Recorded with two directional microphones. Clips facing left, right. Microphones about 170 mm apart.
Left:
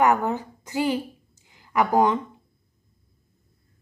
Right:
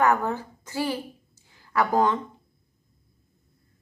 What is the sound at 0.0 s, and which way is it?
A woman's voice, 15° left (ahead or behind).